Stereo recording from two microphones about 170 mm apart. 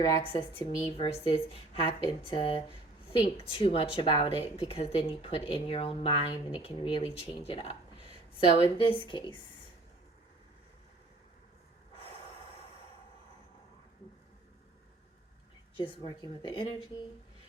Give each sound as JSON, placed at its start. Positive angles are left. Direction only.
{"t": 0.0, "sound": "speech", "side_deg": 25}
{"t": 15.8, "sound": "speech", "side_deg": 25}